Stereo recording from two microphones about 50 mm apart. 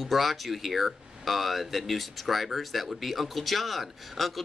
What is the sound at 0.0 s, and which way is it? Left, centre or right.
Speech, centre.